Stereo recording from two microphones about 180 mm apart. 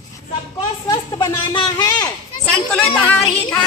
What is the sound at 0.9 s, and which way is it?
Speech, 25° left (ahead or behind).